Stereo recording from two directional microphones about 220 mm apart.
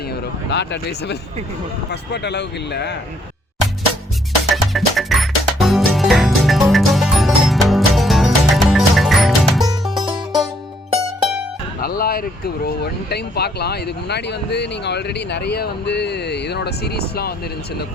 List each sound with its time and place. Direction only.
0.5 s speech: 50° left (ahead or behind)
4.5 s music: centre (ahead or behind)
10.0 s music: 20° right (ahead or behind)
11.8 s music: 45° left (ahead or behind)
12.6 s speech: 45° left (ahead or behind)